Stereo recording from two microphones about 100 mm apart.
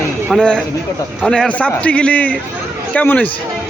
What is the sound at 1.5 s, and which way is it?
A man's voice, 15° left (ahead or behind).